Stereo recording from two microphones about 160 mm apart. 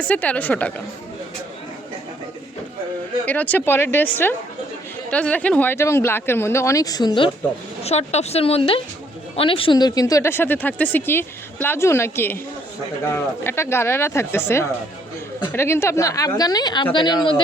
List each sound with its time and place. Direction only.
0.0 s speech: 10° left (ahead or behind)
3.2 s speech: 10° left (ahead or behind); by 7.3 s 25° left (ahead or behind)
7.9 s a woman's voice: 40° left (ahead or behind); by 12.4 s 15° left (ahead or behind)
13.4 s a woman's voice: 15° left (ahead or behind)